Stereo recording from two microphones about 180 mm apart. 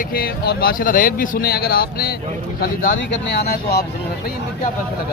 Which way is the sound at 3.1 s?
70° left (ahead or behind).